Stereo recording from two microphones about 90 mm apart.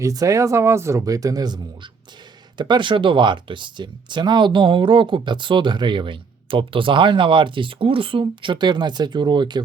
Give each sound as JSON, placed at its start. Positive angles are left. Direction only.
{"t": 0.0, "sound": "speech", "side_deg": -40}